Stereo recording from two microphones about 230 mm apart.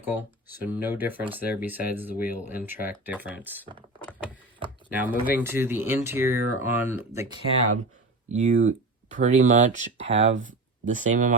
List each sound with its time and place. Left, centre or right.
0.0 s speech: centre
4.9 s speech: centre
8.3 s speech: right